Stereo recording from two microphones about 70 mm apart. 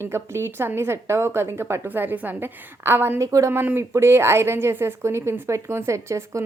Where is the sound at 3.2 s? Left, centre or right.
Right.